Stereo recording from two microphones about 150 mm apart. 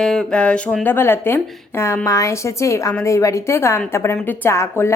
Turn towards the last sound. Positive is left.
turn(degrees=15)  # may be behind; listen again after turning